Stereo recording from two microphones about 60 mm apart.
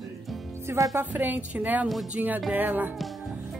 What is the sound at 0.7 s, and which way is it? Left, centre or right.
Music, right.